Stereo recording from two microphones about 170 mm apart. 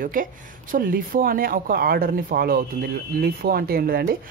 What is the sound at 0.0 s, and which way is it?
Speech, 55° right (ahead or behind).